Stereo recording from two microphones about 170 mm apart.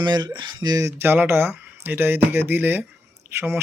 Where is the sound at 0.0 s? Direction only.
25° right (ahead or behind).